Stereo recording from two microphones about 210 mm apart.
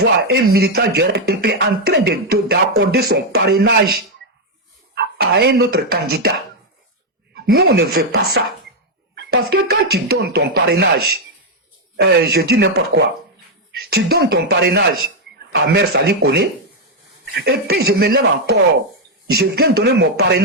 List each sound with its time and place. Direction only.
0.0 s speech: 50° right (ahead or behind)
7.3 s speech: 50° right (ahead or behind)